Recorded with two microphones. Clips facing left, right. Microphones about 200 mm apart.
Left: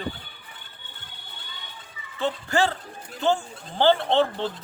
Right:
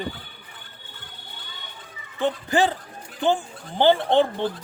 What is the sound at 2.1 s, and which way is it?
A man's voice, 15° right (ahead or behind).